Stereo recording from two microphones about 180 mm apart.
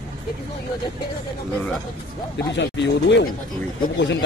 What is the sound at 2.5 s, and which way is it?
Speech, 75° left (ahead or behind).